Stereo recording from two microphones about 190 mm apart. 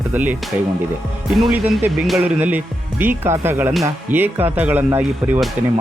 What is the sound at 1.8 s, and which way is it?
Speech, 5° right (ahead or behind).